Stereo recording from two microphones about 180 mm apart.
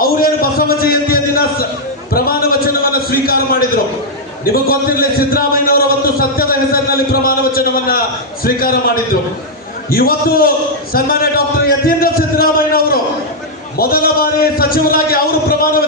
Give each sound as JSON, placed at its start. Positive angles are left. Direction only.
{"t": 0.0, "sound": "a sound", "side_deg": 55}
{"t": 4.4, "sound": "a man's voice", "side_deg": 55}
{"t": 9.9, "sound": "a man's voice", "side_deg": 55}